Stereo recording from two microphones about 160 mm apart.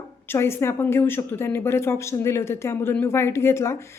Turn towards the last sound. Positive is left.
turn(degrees=15)  # may be behind; listen again after turning